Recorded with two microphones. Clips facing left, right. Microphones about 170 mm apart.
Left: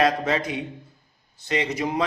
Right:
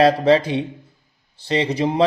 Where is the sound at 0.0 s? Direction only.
30° right (ahead or behind).